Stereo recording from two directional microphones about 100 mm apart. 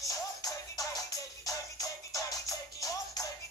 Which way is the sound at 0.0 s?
35° left (ahead or behind).